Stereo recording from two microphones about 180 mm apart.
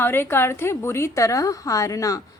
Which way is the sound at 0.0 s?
10° left (ahead or behind).